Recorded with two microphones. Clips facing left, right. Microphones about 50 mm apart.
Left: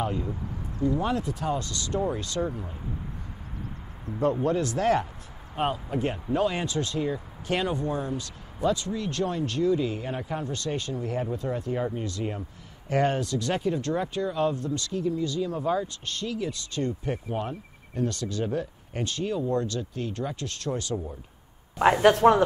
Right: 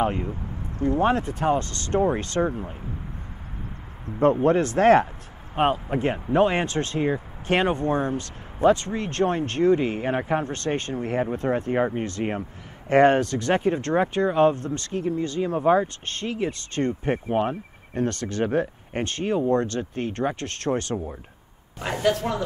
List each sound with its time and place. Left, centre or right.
0.0 s speech: right
4.2 s speech: right
21.7 s speech: left